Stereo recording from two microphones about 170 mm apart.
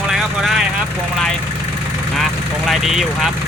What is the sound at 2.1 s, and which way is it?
Speech, centre (ahead or behind).